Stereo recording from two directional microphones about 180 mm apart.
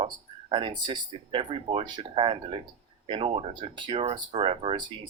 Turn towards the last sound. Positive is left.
turn(degrees=-30)  # may be behind; listen again after turning